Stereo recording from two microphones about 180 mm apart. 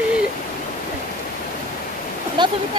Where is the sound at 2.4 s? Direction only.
25° right (ahead or behind).